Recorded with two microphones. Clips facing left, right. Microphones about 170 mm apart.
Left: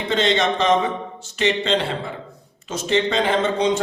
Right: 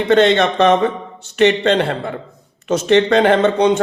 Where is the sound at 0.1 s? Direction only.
60° right (ahead or behind).